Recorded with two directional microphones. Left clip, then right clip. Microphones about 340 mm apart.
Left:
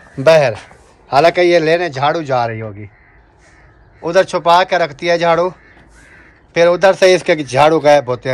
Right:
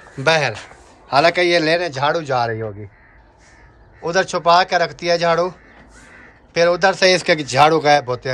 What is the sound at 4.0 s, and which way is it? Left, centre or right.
Speech, centre.